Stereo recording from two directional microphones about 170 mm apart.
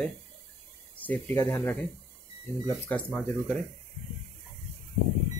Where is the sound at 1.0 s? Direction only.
10° left (ahead or behind).